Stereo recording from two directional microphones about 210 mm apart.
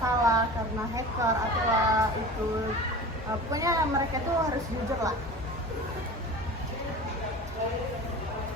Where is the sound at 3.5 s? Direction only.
15° right (ahead or behind).